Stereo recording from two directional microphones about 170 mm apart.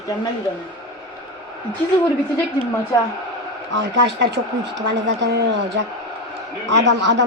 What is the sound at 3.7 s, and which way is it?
A woman's voice, 90° right.